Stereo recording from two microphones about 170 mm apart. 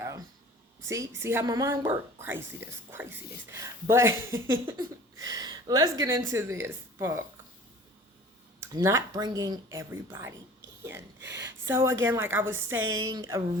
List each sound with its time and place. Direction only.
0.8 s a woman's voice: 15° right (ahead or behind)
8.6 s a woman's voice: 15° right (ahead or behind)
11.3 s a woman's voice: 15° right (ahead or behind)